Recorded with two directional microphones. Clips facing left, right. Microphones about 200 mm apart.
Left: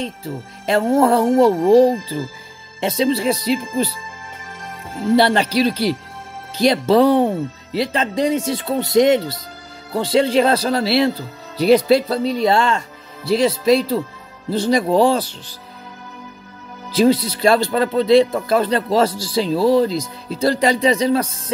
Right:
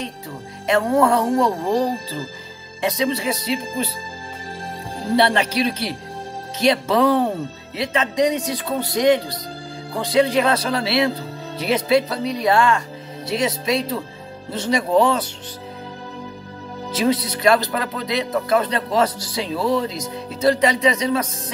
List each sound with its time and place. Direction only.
0.7 s speech: 30° left (ahead or behind)
2.8 s speech: 30° left (ahead or behind)
5.1 s speech: 35° left (ahead or behind)
16.9 s speech: 30° left (ahead or behind)